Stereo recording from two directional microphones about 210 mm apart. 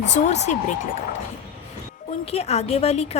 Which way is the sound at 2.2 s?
30° left (ahead or behind).